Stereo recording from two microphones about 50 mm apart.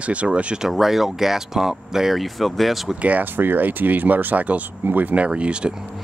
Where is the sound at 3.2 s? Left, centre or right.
Right.